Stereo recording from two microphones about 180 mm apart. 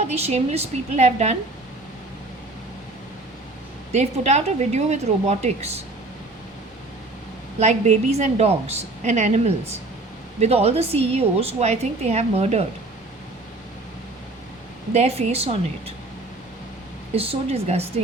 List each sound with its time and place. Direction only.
0.1 s a woman's voice: 35° right (ahead or behind)
3.9 s a woman's voice: 40° right (ahead or behind)
7.6 s a woman's voice: 40° right (ahead or behind)
14.9 s a woman's voice: 35° right (ahead or behind)
17.2 s a woman's voice: 35° right (ahead or behind)